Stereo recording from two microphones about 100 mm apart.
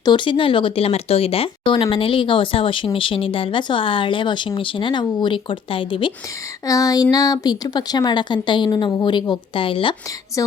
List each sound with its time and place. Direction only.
0.0 s speech: 55° left (ahead or behind)
6.7 s speech: 35° left (ahead or behind); by 9.9 s 60° left (ahead or behind)